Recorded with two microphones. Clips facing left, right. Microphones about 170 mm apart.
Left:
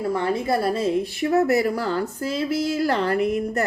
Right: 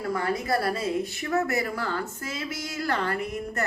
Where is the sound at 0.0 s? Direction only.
25° left (ahead or behind).